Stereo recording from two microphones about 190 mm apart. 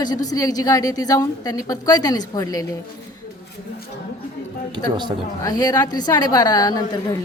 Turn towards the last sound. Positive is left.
turn(degrees=20)  # may be behind; listen again after turning